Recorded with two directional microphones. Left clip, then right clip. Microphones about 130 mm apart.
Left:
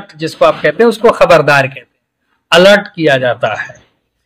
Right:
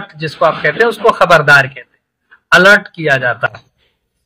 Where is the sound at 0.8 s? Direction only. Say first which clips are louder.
Left 3 dB; 25° left (ahead or behind).